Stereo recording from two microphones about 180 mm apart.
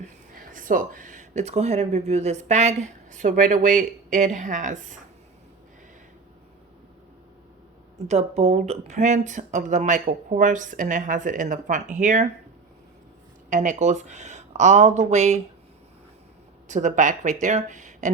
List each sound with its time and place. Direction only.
0.0 s speech: 45° right (ahead or behind)
8.0 s speech: 35° right (ahead or behind)
13.5 s speech: 45° right (ahead or behind)
16.6 s speech: 45° right (ahead or behind)